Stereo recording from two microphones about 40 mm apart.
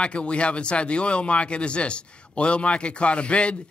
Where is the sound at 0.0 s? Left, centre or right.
Left.